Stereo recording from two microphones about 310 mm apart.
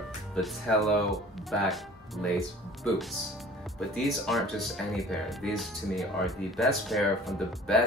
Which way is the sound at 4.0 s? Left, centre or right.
Centre.